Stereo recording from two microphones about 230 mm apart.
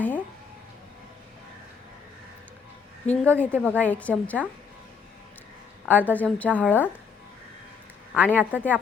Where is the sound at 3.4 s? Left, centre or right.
Centre.